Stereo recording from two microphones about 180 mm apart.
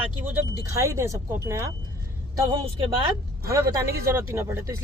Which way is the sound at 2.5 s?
25° right (ahead or behind).